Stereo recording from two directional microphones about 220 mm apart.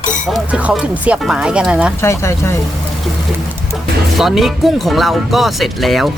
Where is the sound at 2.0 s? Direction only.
10° left (ahead or behind).